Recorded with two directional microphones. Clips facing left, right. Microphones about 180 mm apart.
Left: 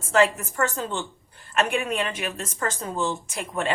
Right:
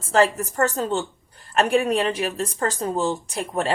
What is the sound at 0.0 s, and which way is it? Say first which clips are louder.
A woman's voice: right 2 dB; 35° right (ahead or behind).